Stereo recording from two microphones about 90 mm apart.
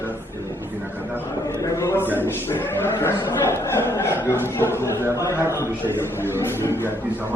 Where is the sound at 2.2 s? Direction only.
25° left (ahead or behind).